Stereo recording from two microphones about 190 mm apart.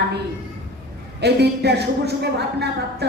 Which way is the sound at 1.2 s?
60° right (ahead or behind).